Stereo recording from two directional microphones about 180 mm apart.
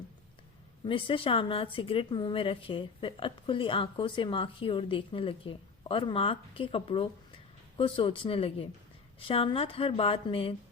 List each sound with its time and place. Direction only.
0.9 s a woman's voice: 30° left (ahead or behind)